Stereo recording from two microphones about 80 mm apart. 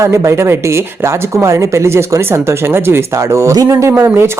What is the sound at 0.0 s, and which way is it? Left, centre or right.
Speech, right.